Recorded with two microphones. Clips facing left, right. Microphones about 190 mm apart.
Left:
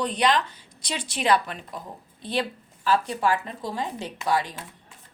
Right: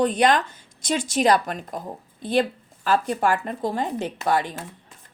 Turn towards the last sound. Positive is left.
turn(degrees=-55)  # may be behind; listen again after turning